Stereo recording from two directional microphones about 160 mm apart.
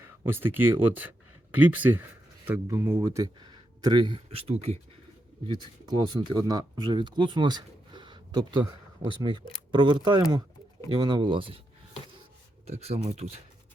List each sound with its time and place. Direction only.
0.3 s speech: 15° right (ahead or behind); by 4.8 s 40° right (ahead or behind)
5.5 s speech: 30° right (ahead or behind)
12.6 s speech: 40° right (ahead or behind)